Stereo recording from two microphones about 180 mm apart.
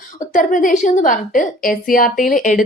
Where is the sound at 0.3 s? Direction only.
45° left (ahead or behind).